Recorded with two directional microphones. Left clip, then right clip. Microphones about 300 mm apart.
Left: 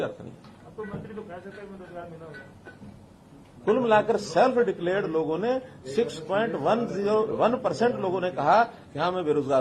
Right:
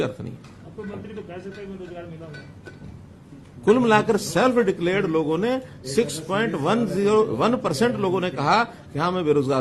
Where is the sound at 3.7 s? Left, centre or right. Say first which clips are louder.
Right 4 dB; right.